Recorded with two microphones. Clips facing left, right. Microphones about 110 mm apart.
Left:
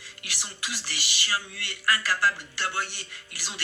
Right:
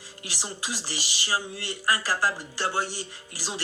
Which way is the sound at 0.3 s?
35° right (ahead or behind).